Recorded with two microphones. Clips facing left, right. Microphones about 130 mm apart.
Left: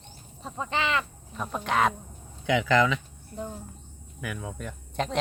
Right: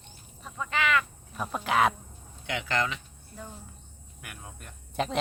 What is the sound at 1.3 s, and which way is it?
Speech, 5° right (ahead or behind).